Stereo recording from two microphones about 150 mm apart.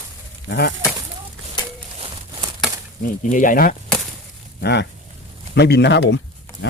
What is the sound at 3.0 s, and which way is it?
Speech, 60° left (ahead or behind).